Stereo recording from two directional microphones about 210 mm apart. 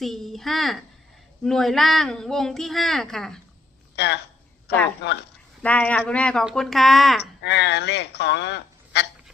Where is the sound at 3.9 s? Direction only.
55° left (ahead or behind).